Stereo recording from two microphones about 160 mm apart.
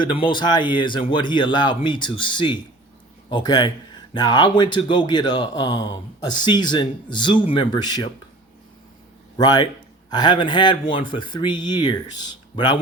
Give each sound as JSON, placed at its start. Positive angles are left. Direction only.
{"t": 0.0, "sound": "a man's voice", "side_deg": 30}
{"t": 9.4, "sound": "a man's voice", "side_deg": 25}